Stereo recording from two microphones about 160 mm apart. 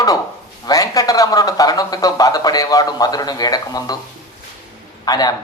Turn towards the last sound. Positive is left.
turn(degrees=25)  # may be behind; listen again after turning